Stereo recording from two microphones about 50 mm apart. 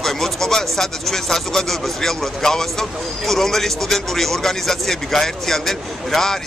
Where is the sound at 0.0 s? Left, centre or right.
Centre.